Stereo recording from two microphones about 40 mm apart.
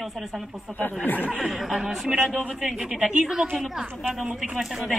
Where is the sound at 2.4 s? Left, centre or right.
Right.